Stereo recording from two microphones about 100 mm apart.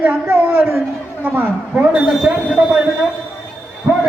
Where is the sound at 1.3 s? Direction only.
15° right (ahead or behind).